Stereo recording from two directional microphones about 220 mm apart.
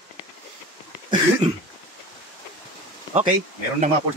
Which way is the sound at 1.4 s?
30° right (ahead or behind).